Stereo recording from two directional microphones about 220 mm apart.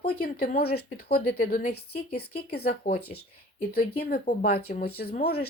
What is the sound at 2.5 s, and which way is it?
Speech, 45° left (ahead or behind).